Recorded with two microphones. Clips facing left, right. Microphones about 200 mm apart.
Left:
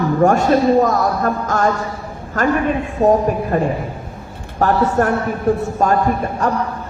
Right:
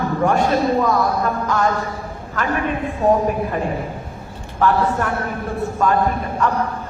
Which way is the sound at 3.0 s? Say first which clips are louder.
Left 3 dB; 45° left (ahead or behind).